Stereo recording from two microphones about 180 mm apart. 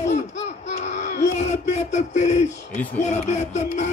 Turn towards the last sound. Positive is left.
turn(degrees=40)  # may be behind; listen again after turning